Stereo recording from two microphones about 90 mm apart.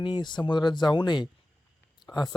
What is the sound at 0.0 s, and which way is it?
Speech, 60° left (ahead or behind).